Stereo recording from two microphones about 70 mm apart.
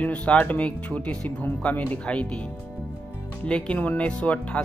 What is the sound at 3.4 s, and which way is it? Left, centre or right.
Speech, centre.